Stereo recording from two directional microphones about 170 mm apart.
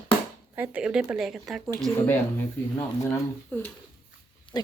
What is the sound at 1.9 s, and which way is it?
Speech, 10° left (ahead or behind).